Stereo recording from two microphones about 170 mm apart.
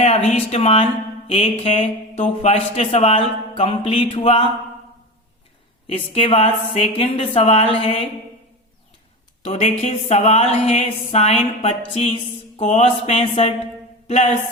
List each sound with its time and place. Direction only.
0.0 s speech: 40° left (ahead or behind)
5.9 s speech: 35° left (ahead or behind)
9.4 s speech: 35° left (ahead or behind)